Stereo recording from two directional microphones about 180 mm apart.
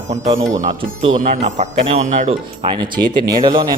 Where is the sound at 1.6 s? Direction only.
40° right (ahead or behind).